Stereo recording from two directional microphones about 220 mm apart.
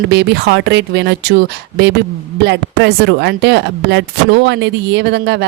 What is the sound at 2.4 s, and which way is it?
Speech, 50° right (ahead or behind).